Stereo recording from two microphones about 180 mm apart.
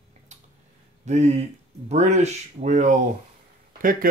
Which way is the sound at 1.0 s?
40° right (ahead or behind).